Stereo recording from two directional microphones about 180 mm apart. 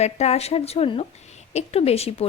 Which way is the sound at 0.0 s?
35° left (ahead or behind).